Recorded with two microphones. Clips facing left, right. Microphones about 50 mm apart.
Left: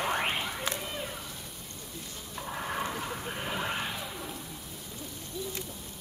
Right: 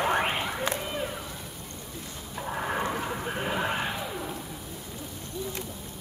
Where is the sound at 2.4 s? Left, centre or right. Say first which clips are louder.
Right 4 dB; centre.